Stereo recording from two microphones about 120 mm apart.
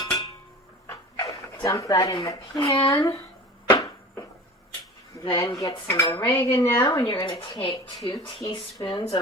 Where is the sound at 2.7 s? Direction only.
45° left (ahead or behind).